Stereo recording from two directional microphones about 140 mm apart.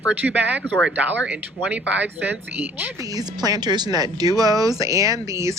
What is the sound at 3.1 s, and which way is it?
Speech, 25° right (ahead or behind).